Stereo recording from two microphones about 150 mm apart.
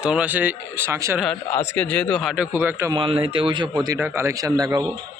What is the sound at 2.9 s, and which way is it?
Speech, 35° right (ahead or behind).